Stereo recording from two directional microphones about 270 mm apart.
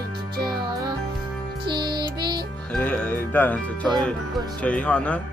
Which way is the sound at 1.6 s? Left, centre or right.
Centre.